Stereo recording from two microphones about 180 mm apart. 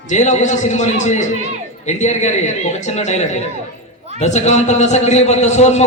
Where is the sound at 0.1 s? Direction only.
40° left (ahead or behind).